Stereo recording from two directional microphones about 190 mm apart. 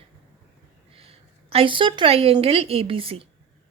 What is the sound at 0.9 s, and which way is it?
A woman's voice, 30° right (ahead or behind).